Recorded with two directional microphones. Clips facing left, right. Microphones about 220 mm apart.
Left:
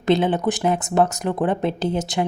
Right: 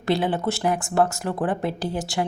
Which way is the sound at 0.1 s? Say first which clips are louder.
Left 4 dB; 20° left (ahead or behind).